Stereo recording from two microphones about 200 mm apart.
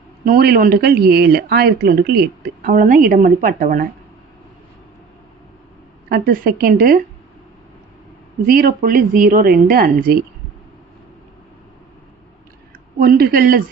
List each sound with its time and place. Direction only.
0.3 s speech: 50° right (ahead or behind)
6.1 s speech: 50° right (ahead or behind)
8.4 s speech: 45° right (ahead or behind)
13.0 s speech: 50° right (ahead or behind)